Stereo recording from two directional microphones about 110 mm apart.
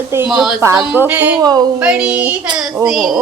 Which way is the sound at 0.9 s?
15° right (ahead or behind).